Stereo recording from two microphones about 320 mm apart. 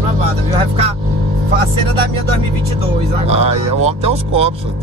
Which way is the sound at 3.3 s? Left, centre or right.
Centre.